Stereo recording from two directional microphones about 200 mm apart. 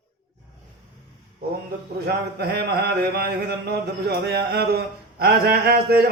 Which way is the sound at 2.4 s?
55° right (ahead or behind).